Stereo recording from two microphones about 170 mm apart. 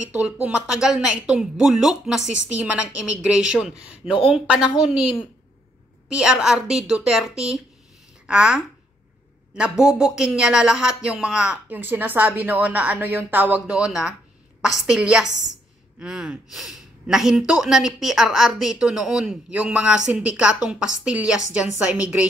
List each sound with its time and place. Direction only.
0.1 s speech: 5° right (ahead or behind)
6.0 s a woman's voice: 5° right (ahead or behind)